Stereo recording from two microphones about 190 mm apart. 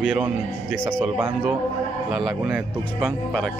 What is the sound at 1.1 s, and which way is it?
A man's voice, 5° right (ahead or behind).